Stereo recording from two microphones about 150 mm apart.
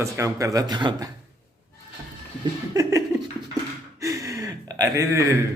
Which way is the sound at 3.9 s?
20° right (ahead or behind).